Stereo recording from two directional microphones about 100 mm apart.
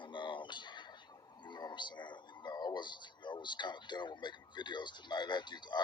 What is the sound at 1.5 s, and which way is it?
Speech, 50° left (ahead or behind).